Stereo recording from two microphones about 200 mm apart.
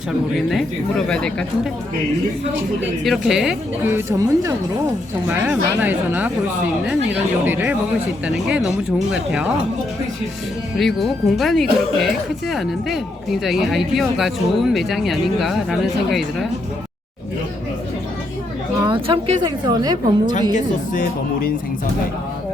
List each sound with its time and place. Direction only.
0.5 s speech: 5° left (ahead or behind)
3.0 s speech: centre (ahead or behind)
10.8 s speech: centre (ahead or behind)
18.8 s speech: 25° right (ahead or behind)
20.5 s speech: 45° left (ahead or behind)